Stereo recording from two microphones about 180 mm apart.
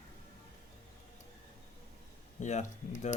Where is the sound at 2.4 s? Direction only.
40° left (ahead or behind).